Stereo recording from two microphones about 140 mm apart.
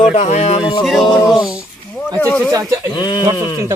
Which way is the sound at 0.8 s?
Centre (ahead or behind).